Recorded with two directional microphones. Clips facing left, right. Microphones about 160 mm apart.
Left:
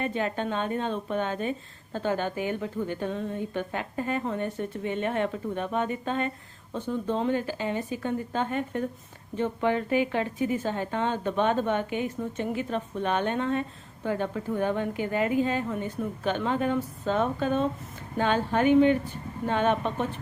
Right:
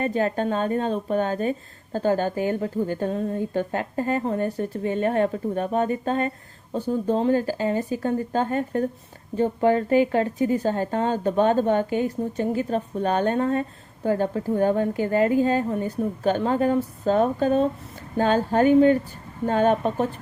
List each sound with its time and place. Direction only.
0.0 s speech: 40° right (ahead or behind)